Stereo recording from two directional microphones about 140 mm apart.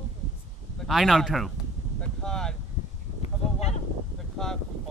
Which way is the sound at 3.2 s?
50° left (ahead or behind).